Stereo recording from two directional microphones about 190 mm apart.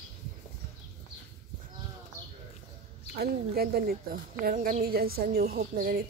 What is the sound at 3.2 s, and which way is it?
Speech, 55° right (ahead or behind).